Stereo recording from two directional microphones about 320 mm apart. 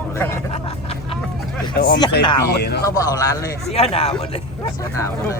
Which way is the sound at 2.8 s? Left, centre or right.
Centre.